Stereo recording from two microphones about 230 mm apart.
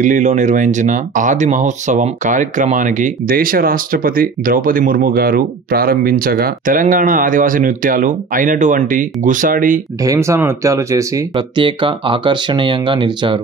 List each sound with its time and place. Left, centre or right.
0.0 s speech: right
10.0 s speech: centre